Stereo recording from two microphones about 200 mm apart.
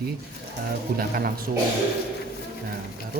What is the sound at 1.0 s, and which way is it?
Speech, 50° right (ahead or behind).